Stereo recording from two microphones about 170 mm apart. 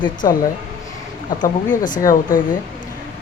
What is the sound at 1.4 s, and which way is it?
Speech, 50° left (ahead or behind).